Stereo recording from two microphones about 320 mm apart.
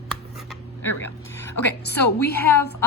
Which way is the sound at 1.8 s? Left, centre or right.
Left.